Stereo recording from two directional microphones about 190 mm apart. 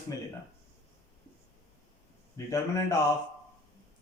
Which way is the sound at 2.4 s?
15° left (ahead or behind).